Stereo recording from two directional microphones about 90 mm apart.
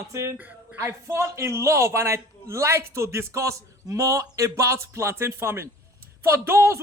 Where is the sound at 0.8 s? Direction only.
30° right (ahead or behind).